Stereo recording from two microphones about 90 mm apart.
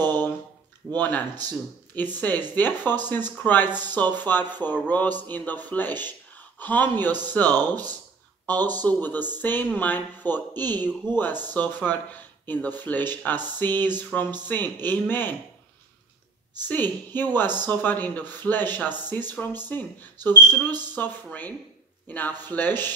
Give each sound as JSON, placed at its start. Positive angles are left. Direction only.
{"t": 0.0, "sound": "a sound", "side_deg": 20}
{"t": 0.9, "sound": "a woman's voice", "side_deg": 20}
{"t": 7.6, "sound": "speech", "side_deg": -45}
{"t": 8.8, "sound": "a woman's voice", "side_deg": 20}
{"t": 16.6, "sound": "a woman's voice", "side_deg": 20}